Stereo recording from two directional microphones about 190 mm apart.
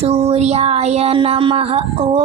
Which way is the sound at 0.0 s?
35° right (ahead or behind).